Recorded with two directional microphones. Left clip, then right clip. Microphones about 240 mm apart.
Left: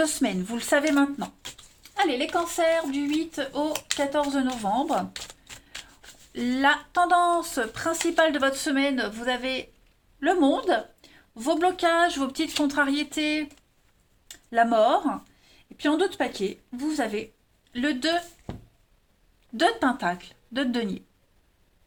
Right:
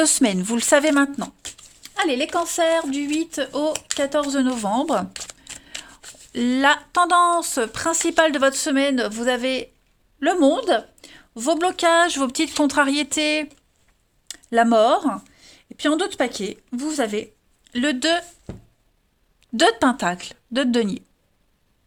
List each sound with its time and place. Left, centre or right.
0.0 s a woman's voice: right
5.1 s speech: centre
6.3 s a woman's voice: right
19.5 s a woman's voice: right